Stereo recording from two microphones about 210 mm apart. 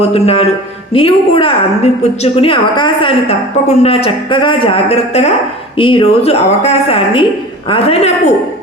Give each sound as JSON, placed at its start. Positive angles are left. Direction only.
{"t": 0.0, "sound": "a woman's voice", "side_deg": 30}